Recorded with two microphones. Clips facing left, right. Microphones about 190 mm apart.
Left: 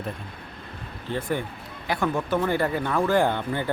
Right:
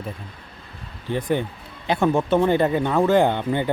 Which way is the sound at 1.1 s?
20° right (ahead or behind).